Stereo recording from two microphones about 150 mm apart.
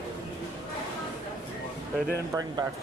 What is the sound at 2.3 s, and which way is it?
Speech, 25° right (ahead or behind).